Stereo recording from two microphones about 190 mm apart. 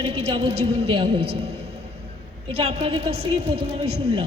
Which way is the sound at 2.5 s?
30° right (ahead or behind).